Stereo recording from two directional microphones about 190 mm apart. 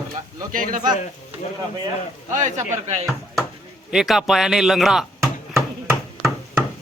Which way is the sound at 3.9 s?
Centre (ahead or behind).